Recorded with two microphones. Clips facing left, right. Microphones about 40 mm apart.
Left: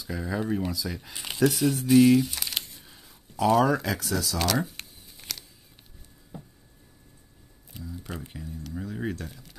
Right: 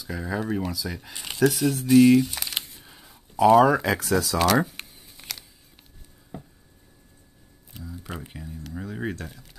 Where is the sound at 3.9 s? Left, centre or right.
Right.